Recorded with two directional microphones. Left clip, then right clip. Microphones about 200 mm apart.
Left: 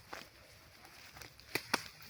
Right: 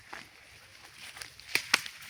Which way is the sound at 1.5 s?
35° left (ahead or behind).